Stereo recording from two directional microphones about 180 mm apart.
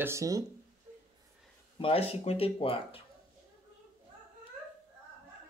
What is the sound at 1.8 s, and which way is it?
Speech, 30° left (ahead or behind).